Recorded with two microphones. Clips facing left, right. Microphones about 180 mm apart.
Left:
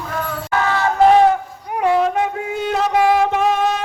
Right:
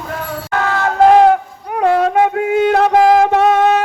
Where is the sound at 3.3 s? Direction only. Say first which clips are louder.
Right 6 dB; 70° right (ahead or behind).